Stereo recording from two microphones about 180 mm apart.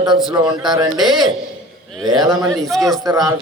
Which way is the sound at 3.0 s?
20° right (ahead or behind).